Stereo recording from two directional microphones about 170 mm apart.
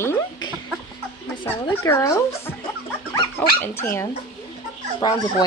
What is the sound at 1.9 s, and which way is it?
Speech, 15° left (ahead or behind).